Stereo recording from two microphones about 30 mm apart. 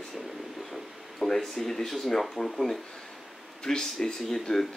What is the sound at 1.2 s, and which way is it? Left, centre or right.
Speech, centre.